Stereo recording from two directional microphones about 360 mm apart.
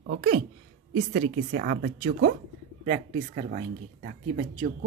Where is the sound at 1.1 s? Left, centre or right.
Right.